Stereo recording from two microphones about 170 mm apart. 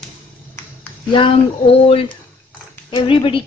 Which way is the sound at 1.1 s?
30° left (ahead or behind).